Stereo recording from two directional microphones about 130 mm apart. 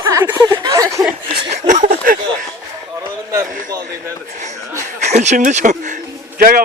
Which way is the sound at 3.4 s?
90° right.